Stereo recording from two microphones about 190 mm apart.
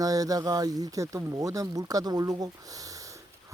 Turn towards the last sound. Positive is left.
turn(degrees=-15)  # may be behind; listen again after turning